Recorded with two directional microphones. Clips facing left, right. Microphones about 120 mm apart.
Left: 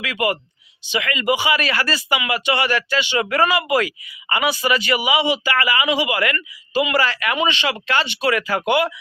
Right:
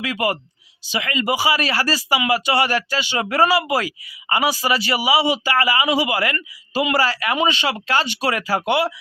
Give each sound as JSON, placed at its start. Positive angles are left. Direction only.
{"t": 0.0, "sound": "speech", "side_deg": -35}